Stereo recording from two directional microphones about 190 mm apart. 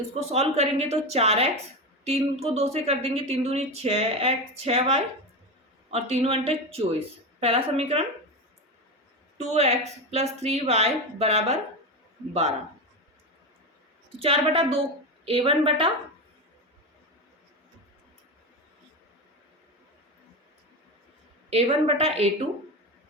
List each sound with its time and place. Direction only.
0.1 s a woman's voice: 35° right (ahead or behind)
9.5 s a woman's voice: 35° right (ahead or behind)
14.2 s a woman's voice: 30° right (ahead or behind)
21.5 s a woman's voice: 30° right (ahead or behind)